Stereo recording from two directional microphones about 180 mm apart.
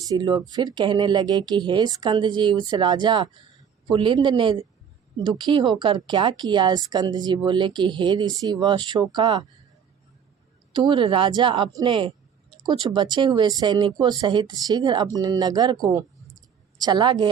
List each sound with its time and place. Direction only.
0.0 s speech: 20° right (ahead or behind)
10.7 s speech: 25° right (ahead or behind)